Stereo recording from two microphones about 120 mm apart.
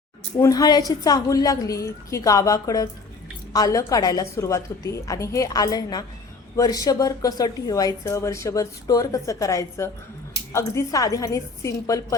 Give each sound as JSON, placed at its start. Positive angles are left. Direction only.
{"t": 0.3, "sound": "a woman's voice", "side_deg": 30}